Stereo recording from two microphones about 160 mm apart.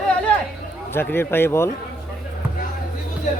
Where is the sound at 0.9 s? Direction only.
15° left (ahead or behind).